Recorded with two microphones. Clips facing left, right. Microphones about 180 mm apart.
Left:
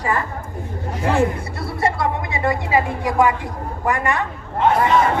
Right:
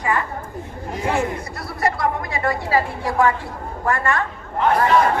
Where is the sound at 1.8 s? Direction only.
25° left (ahead or behind).